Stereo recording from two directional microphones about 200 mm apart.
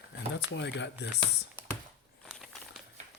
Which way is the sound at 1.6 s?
10° right (ahead or behind).